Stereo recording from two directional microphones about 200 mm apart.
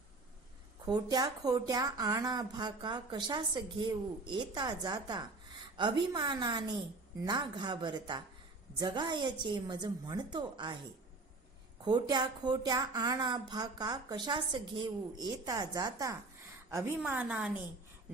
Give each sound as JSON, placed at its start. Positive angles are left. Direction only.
{"t": 0.9, "sound": "speech", "side_deg": -20}
{"t": 11.9, "sound": "a woman's voice", "side_deg": -20}